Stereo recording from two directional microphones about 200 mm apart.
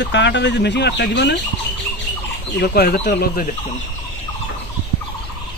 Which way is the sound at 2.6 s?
50° left (ahead or behind).